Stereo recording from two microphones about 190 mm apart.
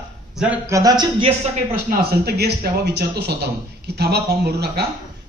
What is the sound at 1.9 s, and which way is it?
Speech, 55° right (ahead or behind).